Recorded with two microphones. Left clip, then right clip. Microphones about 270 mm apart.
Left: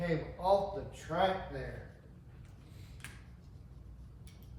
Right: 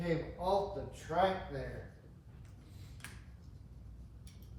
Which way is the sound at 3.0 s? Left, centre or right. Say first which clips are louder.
Left 1 dB; centre.